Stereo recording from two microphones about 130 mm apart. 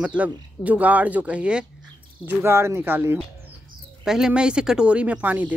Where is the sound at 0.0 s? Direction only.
10° right (ahead or behind).